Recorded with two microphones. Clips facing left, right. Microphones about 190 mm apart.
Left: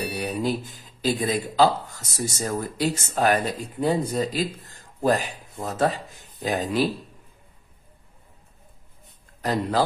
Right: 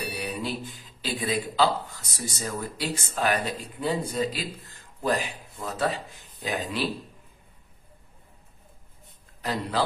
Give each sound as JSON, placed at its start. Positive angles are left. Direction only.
{"t": 0.2, "sound": "speech", "side_deg": 45}
{"t": 9.4, "sound": "speech", "side_deg": 45}